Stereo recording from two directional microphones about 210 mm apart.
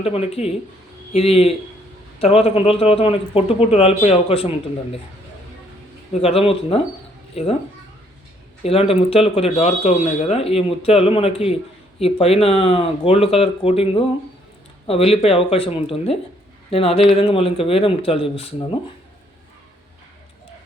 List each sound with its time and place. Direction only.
0.0 s speech: 30° left (ahead or behind)
6.2 s speech: 30° left (ahead or behind)
8.6 s speech: 30° left (ahead or behind)